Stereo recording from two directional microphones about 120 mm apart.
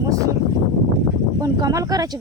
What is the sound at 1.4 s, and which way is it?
Speech, 30° right (ahead or behind).